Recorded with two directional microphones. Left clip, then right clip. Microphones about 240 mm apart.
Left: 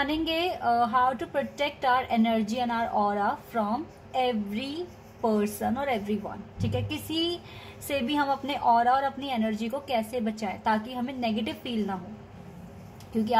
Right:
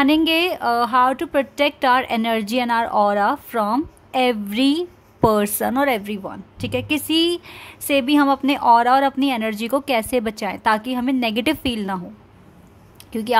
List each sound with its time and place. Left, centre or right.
0.0 s a woman's voice: right